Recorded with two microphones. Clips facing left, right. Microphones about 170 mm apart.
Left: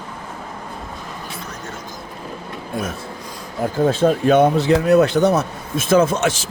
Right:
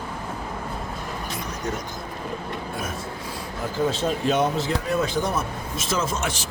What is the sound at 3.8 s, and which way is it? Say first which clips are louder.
Speech: left 7 dB; 50° left (ahead or behind).